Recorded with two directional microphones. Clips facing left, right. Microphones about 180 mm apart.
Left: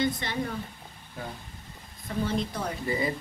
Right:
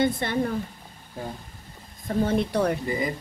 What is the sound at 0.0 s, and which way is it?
Speech, 50° right (ahead or behind).